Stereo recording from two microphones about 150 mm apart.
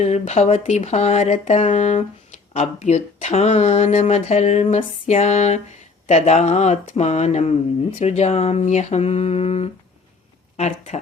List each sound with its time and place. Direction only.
0.0 s speech: 45° left (ahead or behind)